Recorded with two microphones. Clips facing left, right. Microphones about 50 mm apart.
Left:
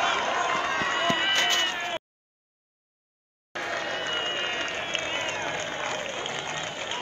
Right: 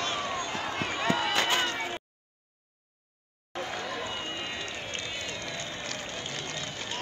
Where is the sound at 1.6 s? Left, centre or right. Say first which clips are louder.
Left 2 dB; left.